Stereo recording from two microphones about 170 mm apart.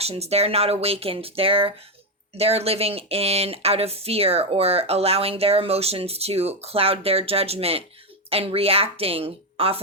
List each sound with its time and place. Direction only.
0.0 s speech: 35° right (ahead or behind)